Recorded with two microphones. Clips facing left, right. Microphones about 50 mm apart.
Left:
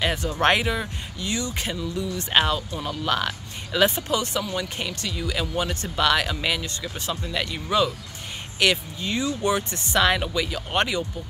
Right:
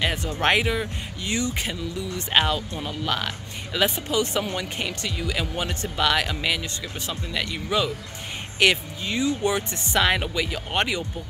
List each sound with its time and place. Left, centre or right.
0.0 s speech: centre
1.2 s speech: right
1.5 s speech: centre
4.2 s speech: right